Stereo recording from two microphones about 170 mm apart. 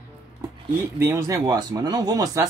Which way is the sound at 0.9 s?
15° right (ahead or behind).